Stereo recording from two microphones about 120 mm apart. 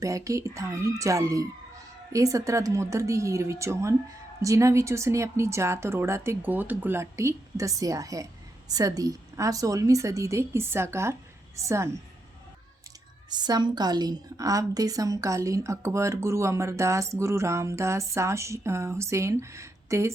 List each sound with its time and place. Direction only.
0.0 s a woman's voice: 25° right (ahead or behind)
13.3 s a woman's voice: 35° right (ahead or behind)